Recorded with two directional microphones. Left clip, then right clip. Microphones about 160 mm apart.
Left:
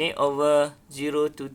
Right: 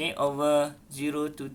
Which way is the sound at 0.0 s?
50° left (ahead or behind).